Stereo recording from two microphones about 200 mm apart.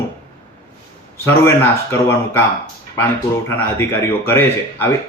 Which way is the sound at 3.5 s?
10° left (ahead or behind).